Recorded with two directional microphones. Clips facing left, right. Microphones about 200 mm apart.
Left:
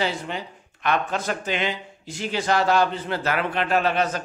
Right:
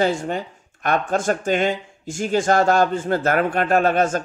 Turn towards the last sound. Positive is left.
turn(degrees=-50)  # may be behind; listen again after turning